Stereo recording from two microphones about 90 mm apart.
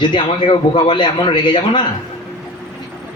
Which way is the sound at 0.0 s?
60° left (ahead or behind).